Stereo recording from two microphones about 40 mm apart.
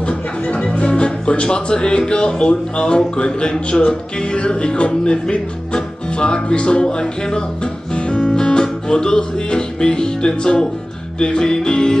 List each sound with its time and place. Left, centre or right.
0.0 s speech: left
8.3 s music: centre